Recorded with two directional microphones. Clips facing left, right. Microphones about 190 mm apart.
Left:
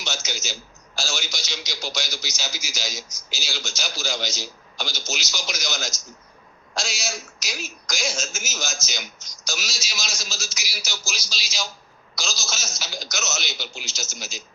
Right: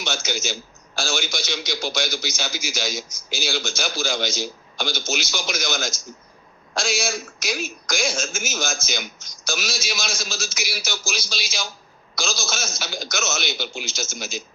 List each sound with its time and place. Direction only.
0.0 s a man's voice: 55° right (ahead or behind)